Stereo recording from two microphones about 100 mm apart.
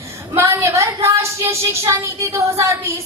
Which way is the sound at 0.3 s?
25° right (ahead or behind).